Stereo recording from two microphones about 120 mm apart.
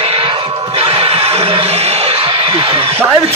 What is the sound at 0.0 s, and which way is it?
Music, 55° right (ahead or behind).